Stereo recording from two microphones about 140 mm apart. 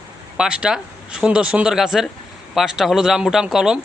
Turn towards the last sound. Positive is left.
turn(degrees=-5)  # may be behind; listen again after turning